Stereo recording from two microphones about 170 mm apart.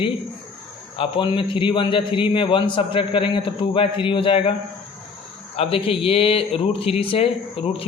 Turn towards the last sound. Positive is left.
turn(degrees=35)  # may be behind; listen again after turning